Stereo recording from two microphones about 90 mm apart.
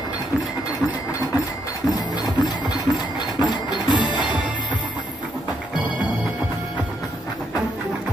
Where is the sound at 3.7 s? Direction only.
55° left (ahead or behind).